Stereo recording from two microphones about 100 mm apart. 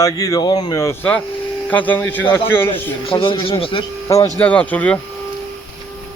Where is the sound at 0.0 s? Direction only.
35° left (ahead or behind).